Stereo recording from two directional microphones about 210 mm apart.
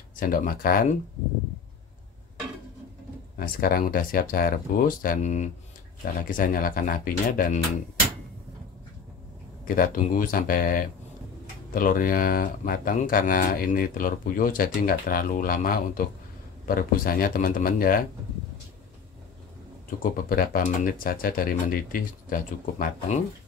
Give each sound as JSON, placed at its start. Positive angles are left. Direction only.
{"t": 0.1, "sound": "speech", "side_deg": 40}
{"t": 3.3, "sound": "speech", "side_deg": 45}
{"t": 9.7, "sound": "speech", "side_deg": 40}
{"t": 20.0, "sound": "speech", "side_deg": 45}